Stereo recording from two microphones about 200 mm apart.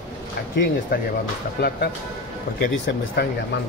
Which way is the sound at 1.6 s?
55° left (ahead or behind).